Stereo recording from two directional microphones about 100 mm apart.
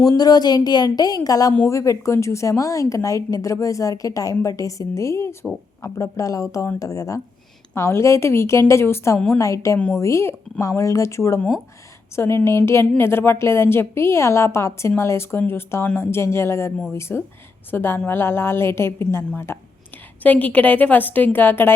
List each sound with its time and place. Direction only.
0.2 s a woman's voice: 40° left (ahead or behind)
9.1 s a woman's voice: 10° left (ahead or behind)
9.4 s a woman's voice: 30° left (ahead or behind)